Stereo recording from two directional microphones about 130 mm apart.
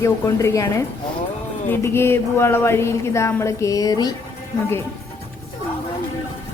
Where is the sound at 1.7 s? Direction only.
20° left (ahead or behind).